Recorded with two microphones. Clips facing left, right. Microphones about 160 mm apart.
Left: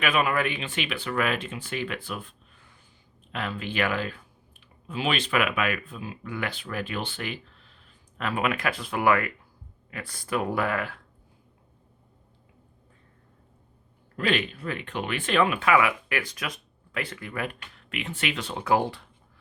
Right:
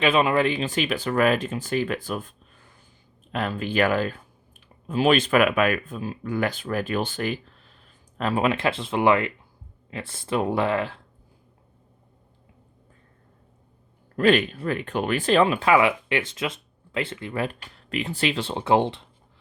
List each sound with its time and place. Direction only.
0.0 s speech: 25° right (ahead or behind); by 7.8 s 40° right (ahead or behind)
8.2 s speech: 30° right (ahead or behind)
14.2 s speech: 45° right (ahead or behind); by 19.0 s 25° right (ahead or behind)